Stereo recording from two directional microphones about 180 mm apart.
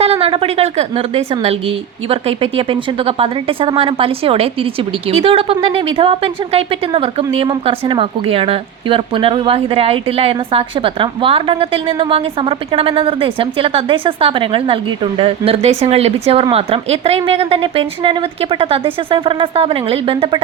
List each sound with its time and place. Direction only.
0.0 s a woman's voice: 35° right (ahead or behind)